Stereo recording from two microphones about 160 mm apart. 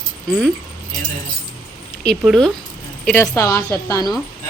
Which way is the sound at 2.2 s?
Centre (ahead or behind).